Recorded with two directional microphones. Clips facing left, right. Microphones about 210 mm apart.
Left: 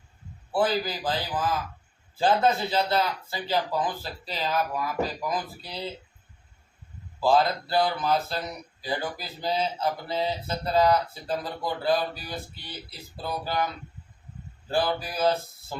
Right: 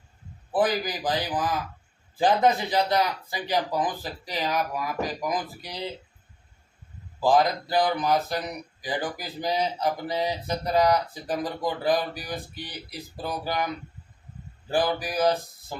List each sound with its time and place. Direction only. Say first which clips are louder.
0.5 s speech: right 1 dB; 15° right (ahead or behind)
7.2 s speech: right 1 dB; 15° right (ahead or behind)
14.7 s speech: right 1 dB; 15° right (ahead or behind)